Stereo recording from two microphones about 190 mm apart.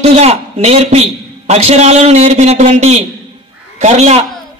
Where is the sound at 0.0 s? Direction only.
35° right (ahead or behind).